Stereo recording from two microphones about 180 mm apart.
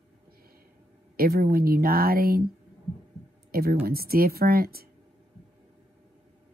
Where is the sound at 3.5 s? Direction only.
55° right (ahead or behind).